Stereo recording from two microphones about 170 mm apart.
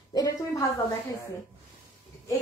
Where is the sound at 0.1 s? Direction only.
20° left (ahead or behind).